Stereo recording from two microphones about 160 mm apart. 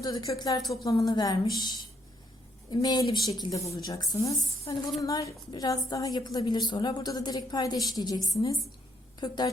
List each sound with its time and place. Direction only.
0.0 s a woman's voice: 25° left (ahead or behind)